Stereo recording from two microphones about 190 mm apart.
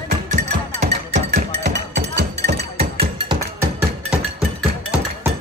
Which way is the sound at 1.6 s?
70° right (ahead or behind).